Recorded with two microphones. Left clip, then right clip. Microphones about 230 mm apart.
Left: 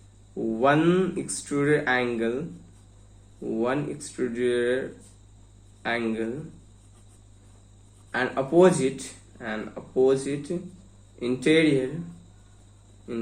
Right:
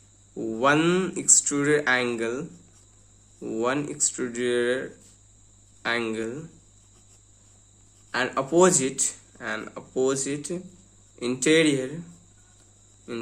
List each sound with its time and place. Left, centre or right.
0.5 s speech: right
3.5 s speech: right
5.8 s speech: right
8.1 s speech: right
13.1 s hum: right